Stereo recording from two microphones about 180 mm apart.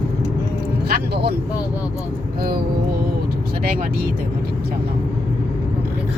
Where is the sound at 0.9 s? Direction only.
65° right (ahead or behind).